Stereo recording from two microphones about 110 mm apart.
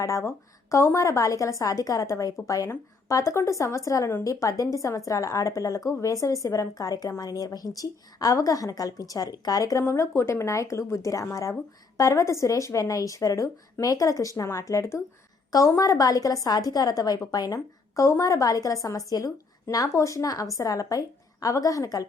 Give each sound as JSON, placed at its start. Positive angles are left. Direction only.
{"t": 0.0, "sound": "a woman's voice", "side_deg": 25}